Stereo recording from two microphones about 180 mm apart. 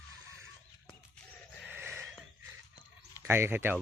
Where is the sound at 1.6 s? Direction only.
10° right (ahead or behind).